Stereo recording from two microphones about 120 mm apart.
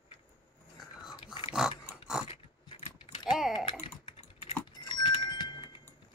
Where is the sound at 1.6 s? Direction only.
5° right (ahead or behind).